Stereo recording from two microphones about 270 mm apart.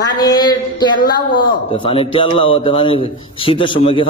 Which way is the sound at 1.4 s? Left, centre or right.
Centre.